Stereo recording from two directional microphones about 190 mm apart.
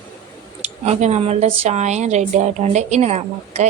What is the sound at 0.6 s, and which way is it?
Speech, 35° right (ahead or behind).